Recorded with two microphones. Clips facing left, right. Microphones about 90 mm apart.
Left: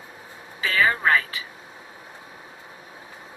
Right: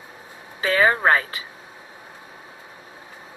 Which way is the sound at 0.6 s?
35° right (ahead or behind).